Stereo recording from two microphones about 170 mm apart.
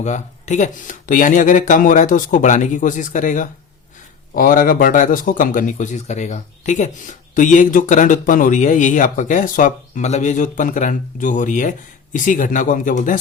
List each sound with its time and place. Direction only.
0.0 s speech: 45° left (ahead or behind)